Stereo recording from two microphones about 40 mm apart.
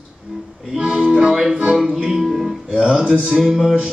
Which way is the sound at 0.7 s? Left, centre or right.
Centre.